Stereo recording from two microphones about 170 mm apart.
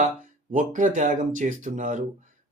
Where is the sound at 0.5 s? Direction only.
50° right (ahead or behind).